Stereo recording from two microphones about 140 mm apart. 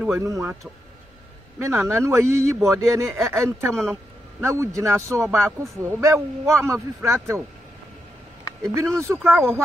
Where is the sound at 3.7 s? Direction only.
5° left (ahead or behind).